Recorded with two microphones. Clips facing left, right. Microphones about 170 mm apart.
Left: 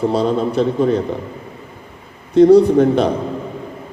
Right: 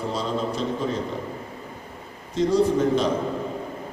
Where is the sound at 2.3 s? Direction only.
60° left (ahead or behind).